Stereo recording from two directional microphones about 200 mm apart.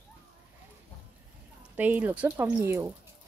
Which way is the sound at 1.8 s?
10° right (ahead or behind).